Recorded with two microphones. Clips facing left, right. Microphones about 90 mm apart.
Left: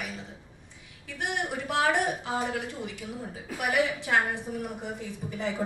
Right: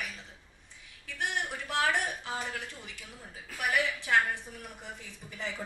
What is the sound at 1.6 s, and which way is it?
Speech, 20° left (ahead or behind).